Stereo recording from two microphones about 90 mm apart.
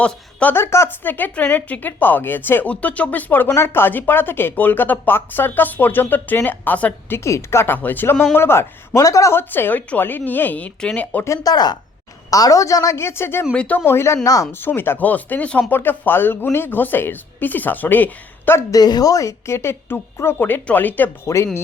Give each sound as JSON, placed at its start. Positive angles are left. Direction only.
{"t": 0.0, "sound": "speech", "side_deg": 15}
{"t": 0.5, "sound": "speech", "side_deg": 30}
{"t": 7.3, "sound": "speech", "side_deg": 30}
{"t": 9.0, "sound": "a woman's voice", "side_deg": 40}
{"t": 9.3, "sound": "speech", "side_deg": 25}
{"t": 11.3, "sound": "a woman's voice", "side_deg": 45}
{"t": 18.7, "sound": "a woman's voice", "side_deg": 45}
{"t": 21.2, "sound": "a woman's voice", "side_deg": 35}